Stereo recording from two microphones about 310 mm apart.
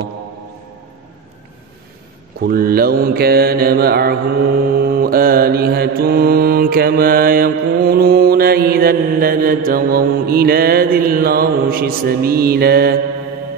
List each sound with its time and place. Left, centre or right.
2.4 s mantra: right